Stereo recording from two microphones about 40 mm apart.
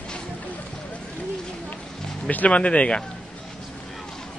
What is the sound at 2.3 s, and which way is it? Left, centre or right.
Speech, left.